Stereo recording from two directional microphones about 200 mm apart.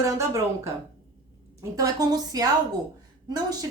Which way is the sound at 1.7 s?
15° right (ahead or behind).